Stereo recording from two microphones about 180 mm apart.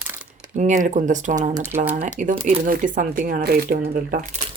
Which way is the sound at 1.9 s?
45° right (ahead or behind).